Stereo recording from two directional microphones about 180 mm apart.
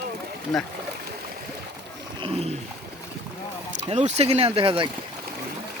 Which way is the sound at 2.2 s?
35° right (ahead or behind).